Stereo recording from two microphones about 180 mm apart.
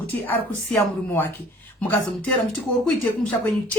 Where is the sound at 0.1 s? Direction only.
10° left (ahead or behind).